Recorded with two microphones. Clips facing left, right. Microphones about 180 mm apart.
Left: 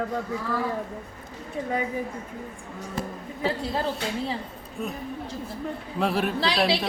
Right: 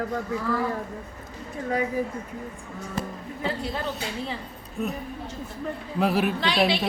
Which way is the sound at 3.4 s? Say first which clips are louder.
Left 3 dB; 30° left (ahead or behind).